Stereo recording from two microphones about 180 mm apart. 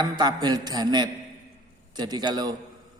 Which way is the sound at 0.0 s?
20° right (ahead or behind).